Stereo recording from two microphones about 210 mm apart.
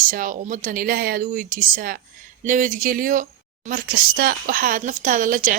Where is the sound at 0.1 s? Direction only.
40° right (ahead or behind).